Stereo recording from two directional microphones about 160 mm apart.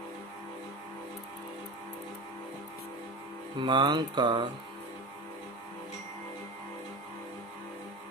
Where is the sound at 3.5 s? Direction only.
30° right (ahead or behind).